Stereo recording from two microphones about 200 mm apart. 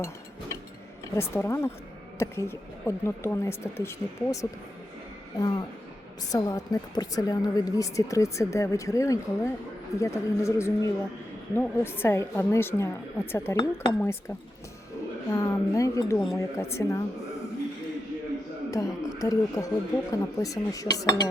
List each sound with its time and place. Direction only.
1.1 s a woman's voice: 15° left (ahead or behind)
18.7 s a woman's voice: 15° left (ahead or behind)